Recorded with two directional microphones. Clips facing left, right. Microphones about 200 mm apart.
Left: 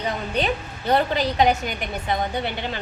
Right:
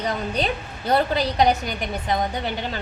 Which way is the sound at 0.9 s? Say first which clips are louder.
Even; 40° right (ahead or behind).